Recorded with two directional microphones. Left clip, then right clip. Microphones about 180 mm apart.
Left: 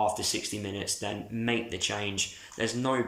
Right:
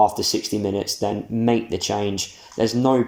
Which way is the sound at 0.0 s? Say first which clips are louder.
Right 10 dB; 35° right (ahead or behind).